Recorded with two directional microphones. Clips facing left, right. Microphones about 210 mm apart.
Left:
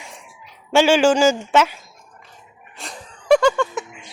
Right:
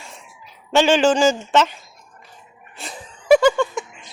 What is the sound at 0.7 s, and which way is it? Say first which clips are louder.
A woman's voice: left 1 dB; 10° left (ahead or behind).